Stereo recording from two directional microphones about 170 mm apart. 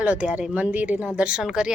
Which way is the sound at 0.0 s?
10° right (ahead or behind).